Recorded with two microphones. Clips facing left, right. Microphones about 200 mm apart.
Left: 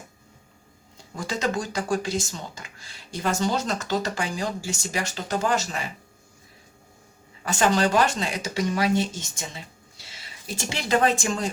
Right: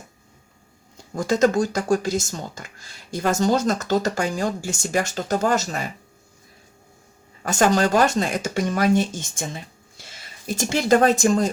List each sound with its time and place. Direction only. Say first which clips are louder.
1.1 s speech: right 8 dB; 45° right (ahead or behind)
7.4 s speech: right 3 dB; 45° right (ahead or behind)